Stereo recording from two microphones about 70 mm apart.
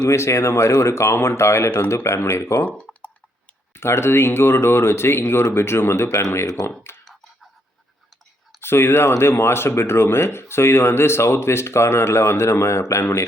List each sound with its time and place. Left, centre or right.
0.1 s speech: left
2.6 s clicking: centre
3.8 s speech: left
6.9 s a sound: left
8.6 s speech: left